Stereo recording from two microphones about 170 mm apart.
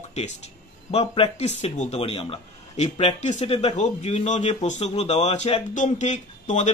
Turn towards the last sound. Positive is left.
turn(degrees=45)  # may be behind; listen again after turning